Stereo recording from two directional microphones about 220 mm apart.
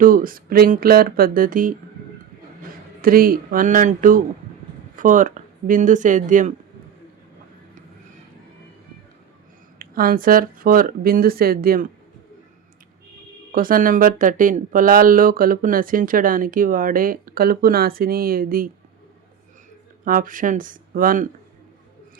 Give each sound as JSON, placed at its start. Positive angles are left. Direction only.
{"t": 0.0, "sound": "speech", "side_deg": -40}
{"t": 3.0, "sound": "speech", "side_deg": -40}
{"t": 9.7, "sound": "speech", "side_deg": -40}
{"t": 13.5, "sound": "speech", "side_deg": -40}
{"t": 20.1, "sound": "speech", "side_deg": -40}